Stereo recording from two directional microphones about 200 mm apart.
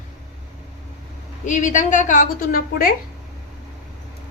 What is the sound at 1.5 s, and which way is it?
A woman's voice, 40° left (ahead or behind).